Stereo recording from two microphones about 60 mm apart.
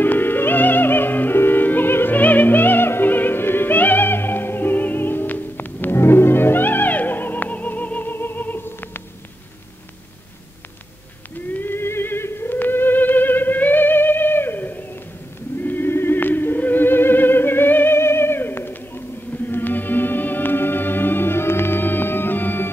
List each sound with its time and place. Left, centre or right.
0.0 s music: left
11.6 s music: left